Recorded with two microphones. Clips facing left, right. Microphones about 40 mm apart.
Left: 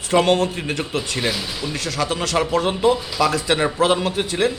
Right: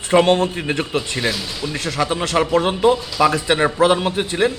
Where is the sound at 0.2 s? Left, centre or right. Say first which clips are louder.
Right 1 dB; right.